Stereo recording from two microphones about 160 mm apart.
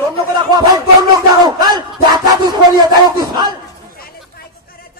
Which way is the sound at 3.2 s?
25° right (ahead or behind).